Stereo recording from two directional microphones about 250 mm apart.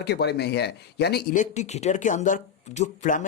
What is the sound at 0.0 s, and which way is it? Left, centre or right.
Speech, left.